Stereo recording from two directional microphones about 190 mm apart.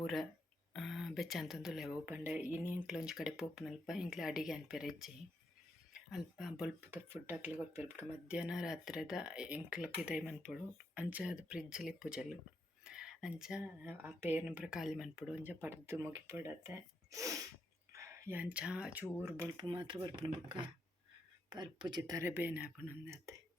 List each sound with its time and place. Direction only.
0.0 s speech: centre (ahead or behind)
19.6 s speech: 25° right (ahead or behind)